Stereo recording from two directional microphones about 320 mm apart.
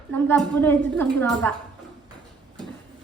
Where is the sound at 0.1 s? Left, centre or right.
Centre.